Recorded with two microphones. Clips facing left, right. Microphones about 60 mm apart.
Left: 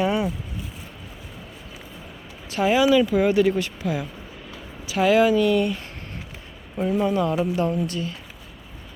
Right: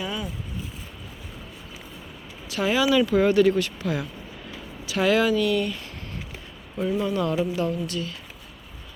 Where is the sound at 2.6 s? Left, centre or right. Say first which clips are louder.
Left 4 dB; left.